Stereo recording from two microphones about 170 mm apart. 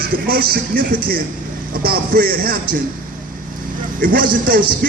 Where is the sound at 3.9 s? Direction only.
55° right (ahead or behind).